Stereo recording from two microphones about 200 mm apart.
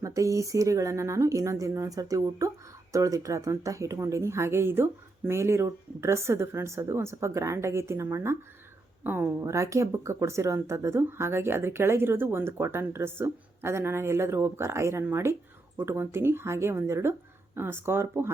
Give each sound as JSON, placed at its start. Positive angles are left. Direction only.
{"t": 0.0, "sound": "speech", "side_deg": -15}